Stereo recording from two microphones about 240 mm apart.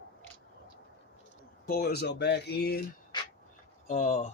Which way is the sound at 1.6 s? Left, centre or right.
Left.